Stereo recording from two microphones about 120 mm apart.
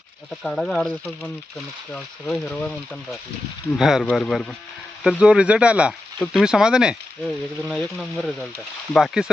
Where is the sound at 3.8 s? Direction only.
5° right (ahead or behind).